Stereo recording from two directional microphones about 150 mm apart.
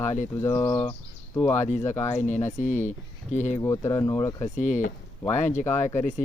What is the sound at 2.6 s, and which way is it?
Speech, 55° left (ahead or behind).